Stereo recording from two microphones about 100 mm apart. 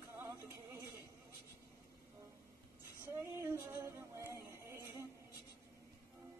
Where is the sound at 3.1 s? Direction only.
25° right (ahead or behind).